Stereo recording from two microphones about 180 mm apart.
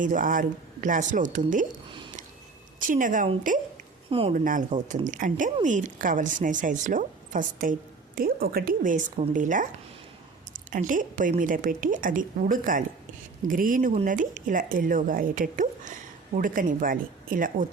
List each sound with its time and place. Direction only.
0.0 s a woman's voice: 50° right (ahead or behind)
2.7 s a woman's voice: 50° right (ahead or behind)
4.1 s speech: 30° right (ahead or behind)
4.4 s a woman's voice: 45° right (ahead or behind)